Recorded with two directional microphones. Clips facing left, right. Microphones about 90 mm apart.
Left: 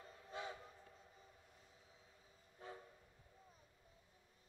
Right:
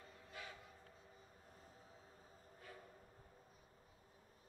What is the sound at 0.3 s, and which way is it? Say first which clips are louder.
Train: left 6 dB; 25° left (ahead or behind).